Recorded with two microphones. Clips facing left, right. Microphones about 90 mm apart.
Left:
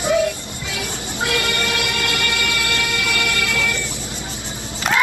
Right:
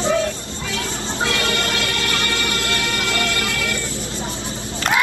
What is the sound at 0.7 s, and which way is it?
Music, 15° left (ahead or behind).